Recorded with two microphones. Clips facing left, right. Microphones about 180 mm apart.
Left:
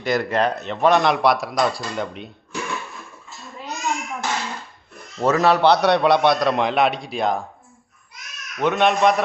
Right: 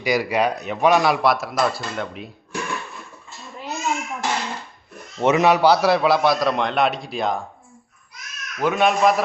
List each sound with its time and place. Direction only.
0.0 s speech: 5° right (ahead or behind)
0.9 s speech: centre (ahead or behind)
3.3 s babbling: centre (ahead or behind)
5.2 s a man's voice: 20° right (ahead or behind)
5.5 s speech: 5° right (ahead or behind)